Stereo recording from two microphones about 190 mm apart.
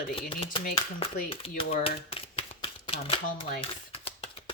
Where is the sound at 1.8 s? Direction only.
30° left (ahead or behind).